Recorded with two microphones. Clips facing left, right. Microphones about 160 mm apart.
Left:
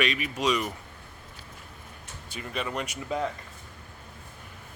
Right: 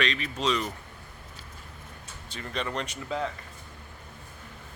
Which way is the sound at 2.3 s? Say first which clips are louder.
Even; 10° left (ahead or behind).